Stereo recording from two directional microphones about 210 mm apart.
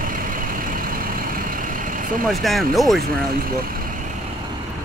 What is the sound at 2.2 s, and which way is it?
Speech, centre (ahead or behind).